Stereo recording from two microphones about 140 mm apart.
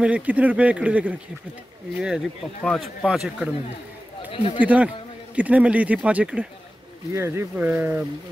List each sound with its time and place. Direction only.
0.0 s a man's voice: 10° right (ahead or behind)
4.3 s speech: 40° left (ahead or behind)
4.6 s a man's voice: 10° right (ahead or behind)